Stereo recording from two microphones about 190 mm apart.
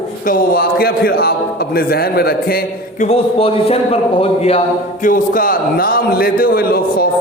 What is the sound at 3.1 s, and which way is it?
A man's voice, 30° left (ahead or behind).